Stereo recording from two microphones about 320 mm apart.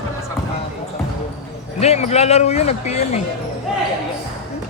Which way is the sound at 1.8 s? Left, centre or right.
Centre.